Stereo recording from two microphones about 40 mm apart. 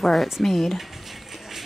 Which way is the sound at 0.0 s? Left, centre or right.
Centre.